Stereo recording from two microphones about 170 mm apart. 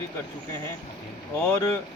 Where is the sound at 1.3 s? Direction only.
15° left (ahead or behind).